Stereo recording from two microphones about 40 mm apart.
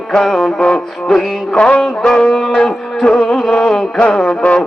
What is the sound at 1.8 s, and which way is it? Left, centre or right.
Music, left.